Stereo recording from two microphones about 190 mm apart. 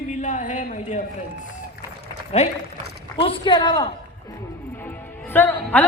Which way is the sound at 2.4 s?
35° left (ahead or behind).